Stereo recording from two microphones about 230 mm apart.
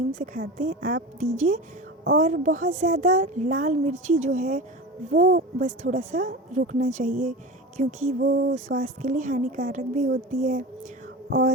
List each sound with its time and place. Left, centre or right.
0.2 s a woman's voice: right
8.2 s a sound: right
8.5 s a woman's voice: right